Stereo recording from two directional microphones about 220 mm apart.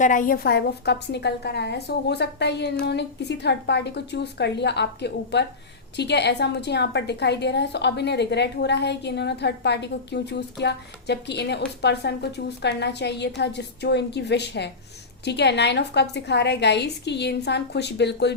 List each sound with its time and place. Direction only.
0.0 s a woman's voice: 35° left (ahead or behind)